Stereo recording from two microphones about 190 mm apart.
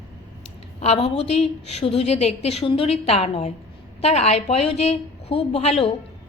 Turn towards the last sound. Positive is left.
turn(degrees=35)  # may be behind; listen again after turning